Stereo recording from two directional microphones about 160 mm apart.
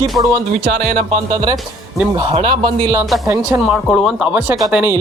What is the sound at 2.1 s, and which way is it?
Speech, 30° right (ahead or behind).